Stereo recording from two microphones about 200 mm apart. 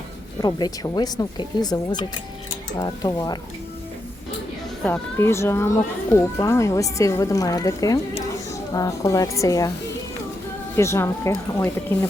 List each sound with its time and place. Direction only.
0.4 s speech: 20° left (ahead or behind)
4.8 s speech: 10° left (ahead or behind)
10.8 s speech: 15° left (ahead or behind)